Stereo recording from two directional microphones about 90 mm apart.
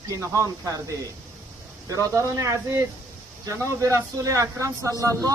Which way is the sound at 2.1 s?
35° right (ahead or behind).